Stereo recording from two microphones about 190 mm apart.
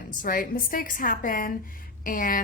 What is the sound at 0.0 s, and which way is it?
A woman's voice, 45° left (ahead or behind).